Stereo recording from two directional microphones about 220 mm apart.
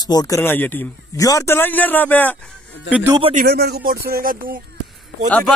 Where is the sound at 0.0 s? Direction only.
15° left (ahead or behind).